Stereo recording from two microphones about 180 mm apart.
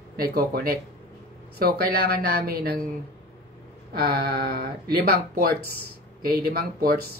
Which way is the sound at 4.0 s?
60° right (ahead or behind).